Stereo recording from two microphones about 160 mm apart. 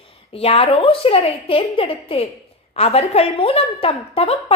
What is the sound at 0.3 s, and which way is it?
A woman's voice, 40° left (ahead or behind).